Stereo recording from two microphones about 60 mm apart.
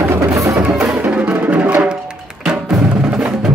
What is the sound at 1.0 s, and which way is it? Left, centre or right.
Music, right.